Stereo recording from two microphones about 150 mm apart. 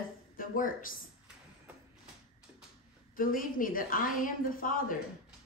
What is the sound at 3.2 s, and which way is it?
A woman's voice, 65° left (ahead or behind).